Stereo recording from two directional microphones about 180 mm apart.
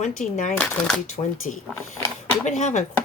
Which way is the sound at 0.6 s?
5° left (ahead or behind).